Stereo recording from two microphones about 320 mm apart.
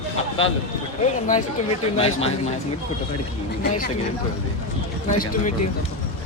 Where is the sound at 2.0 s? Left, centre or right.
Centre.